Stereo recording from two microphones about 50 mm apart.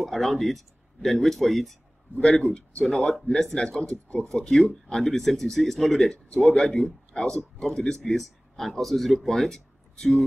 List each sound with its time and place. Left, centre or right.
0.0 s speech: centre
6.7 s speech: centre